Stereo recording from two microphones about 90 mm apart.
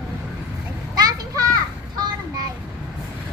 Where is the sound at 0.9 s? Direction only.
45° right (ahead or behind).